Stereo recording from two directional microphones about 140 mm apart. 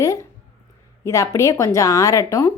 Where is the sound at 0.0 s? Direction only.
20° left (ahead or behind).